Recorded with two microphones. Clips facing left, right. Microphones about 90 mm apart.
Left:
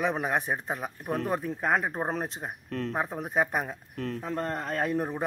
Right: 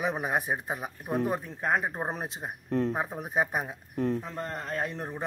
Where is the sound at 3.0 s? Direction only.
Centre (ahead or behind).